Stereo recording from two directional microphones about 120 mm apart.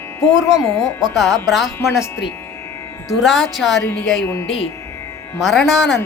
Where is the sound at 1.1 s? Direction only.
Centre (ahead or behind).